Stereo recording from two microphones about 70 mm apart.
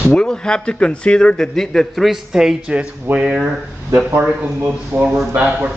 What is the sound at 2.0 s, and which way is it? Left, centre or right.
Speech, centre.